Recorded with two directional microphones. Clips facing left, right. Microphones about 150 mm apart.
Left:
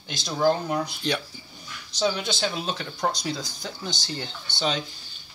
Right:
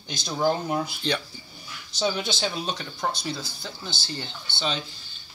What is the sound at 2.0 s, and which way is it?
A man's voice, centre (ahead or behind).